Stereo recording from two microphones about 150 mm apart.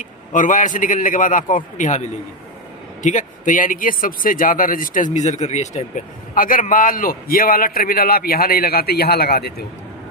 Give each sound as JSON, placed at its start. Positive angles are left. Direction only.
{"t": 0.0, "sound": "a man's voice", "side_deg": 60}